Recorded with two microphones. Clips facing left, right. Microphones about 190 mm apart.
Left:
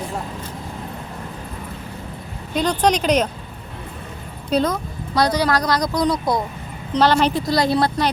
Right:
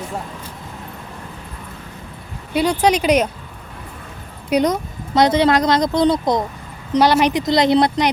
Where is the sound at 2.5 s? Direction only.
10° right (ahead or behind).